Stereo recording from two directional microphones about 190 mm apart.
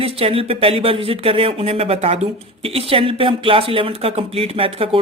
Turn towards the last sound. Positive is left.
turn(degrees=-30)  # may be behind; listen again after turning